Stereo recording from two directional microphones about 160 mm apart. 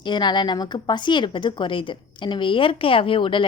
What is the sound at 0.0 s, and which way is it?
Speech, 30° left (ahead or behind).